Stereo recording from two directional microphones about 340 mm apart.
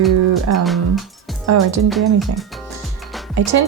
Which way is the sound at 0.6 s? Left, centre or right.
Centre.